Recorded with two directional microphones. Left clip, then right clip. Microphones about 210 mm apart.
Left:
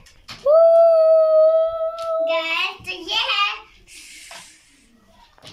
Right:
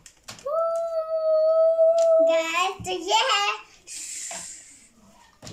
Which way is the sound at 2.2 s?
35° right (ahead or behind).